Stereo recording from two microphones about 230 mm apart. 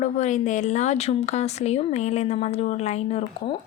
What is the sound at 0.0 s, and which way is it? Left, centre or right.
A woman's voice, left.